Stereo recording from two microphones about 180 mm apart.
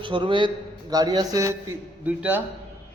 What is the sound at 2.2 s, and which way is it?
Speech, 10° right (ahead or behind).